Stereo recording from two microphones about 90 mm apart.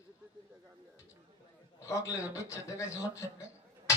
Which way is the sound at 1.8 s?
35° left (ahead or behind).